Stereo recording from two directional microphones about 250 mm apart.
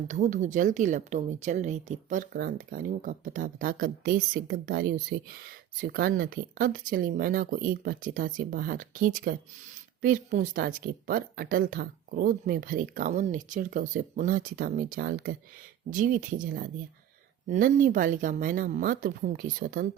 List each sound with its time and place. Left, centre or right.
0.1 s a woman's voice: right